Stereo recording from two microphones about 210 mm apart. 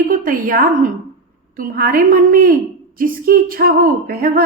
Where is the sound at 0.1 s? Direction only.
40° right (ahead or behind).